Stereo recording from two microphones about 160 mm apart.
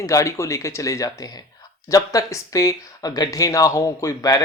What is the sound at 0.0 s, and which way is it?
Speech, 20° left (ahead or behind).